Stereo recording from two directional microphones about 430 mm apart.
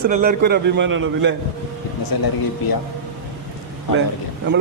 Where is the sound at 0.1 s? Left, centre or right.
Right.